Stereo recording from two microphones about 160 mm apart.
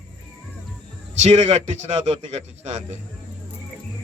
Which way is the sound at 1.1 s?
45° right (ahead or behind).